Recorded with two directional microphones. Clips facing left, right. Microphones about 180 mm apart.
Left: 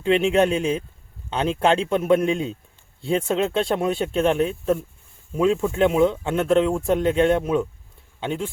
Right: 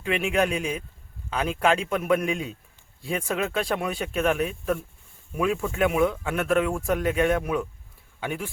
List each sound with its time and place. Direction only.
0.0 s a man's voice: 25° left (ahead or behind)